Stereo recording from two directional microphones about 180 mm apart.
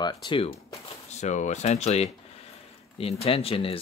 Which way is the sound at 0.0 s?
25° left (ahead or behind).